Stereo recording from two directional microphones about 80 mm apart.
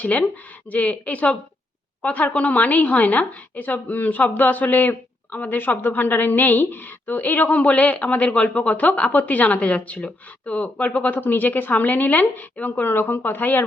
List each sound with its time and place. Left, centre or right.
0.0 s a woman's voice: centre